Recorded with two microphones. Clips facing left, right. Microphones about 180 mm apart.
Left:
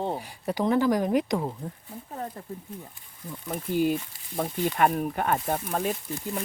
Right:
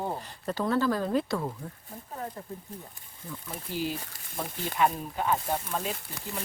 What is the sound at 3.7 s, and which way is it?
Speech, 55° left (ahead or behind).